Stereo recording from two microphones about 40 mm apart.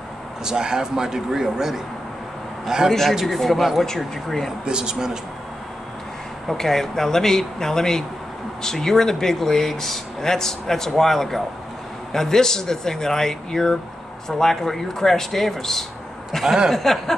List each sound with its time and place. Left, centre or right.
0.5 s speech: centre
3.1 s speech: centre
4.6 s speech: centre
6.4 s speech: centre
16.3 s a sound: centre
16.7 s speech: centre